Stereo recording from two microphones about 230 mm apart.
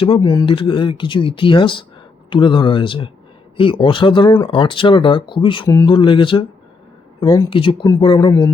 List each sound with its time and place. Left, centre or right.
0.0 s speech: left